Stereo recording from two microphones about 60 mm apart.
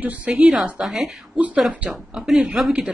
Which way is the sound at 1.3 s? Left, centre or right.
Right.